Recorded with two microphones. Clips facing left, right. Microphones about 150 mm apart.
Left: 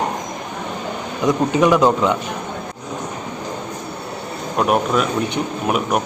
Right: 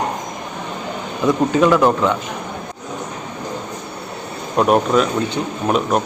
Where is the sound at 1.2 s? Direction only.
20° left (ahead or behind).